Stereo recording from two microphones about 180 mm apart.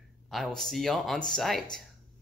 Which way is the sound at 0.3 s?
Centre (ahead or behind).